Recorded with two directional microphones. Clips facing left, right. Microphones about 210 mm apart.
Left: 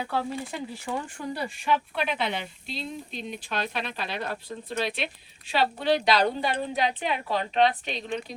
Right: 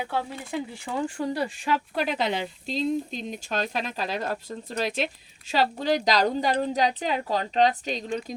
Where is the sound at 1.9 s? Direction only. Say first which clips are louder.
Right 3 dB; 40° right (ahead or behind).